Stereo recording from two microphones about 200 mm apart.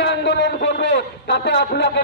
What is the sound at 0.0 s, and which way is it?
A man's voice, 60° left (ahead or behind).